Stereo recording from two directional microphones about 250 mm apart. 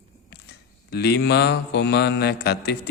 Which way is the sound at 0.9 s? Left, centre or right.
Left.